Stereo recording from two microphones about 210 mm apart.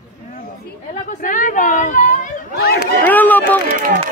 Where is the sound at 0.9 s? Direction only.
35° left (ahead or behind).